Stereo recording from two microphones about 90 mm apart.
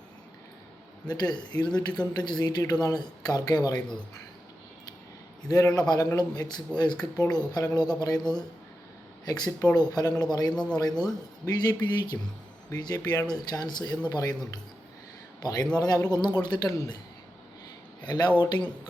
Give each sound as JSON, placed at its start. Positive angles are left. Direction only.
{"t": 1.0, "sound": "speech", "side_deg": 50}
{"t": 3.8, "sound": "speech", "side_deg": 10}
{"t": 5.5, "sound": "speech", "side_deg": 40}
{"t": 15.4, "sound": "a man's voice", "side_deg": 45}
{"t": 18.0, "sound": "speech", "side_deg": 55}